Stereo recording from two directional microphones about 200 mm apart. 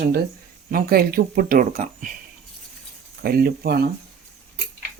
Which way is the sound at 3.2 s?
50° right (ahead or behind).